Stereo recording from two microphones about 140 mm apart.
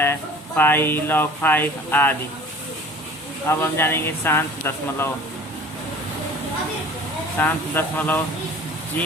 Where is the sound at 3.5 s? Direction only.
15° left (ahead or behind).